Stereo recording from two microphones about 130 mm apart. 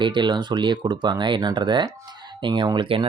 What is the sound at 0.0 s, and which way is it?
Speech, 35° right (ahead or behind).